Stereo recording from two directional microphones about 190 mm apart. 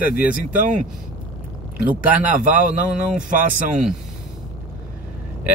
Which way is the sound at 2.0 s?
10° right (ahead or behind).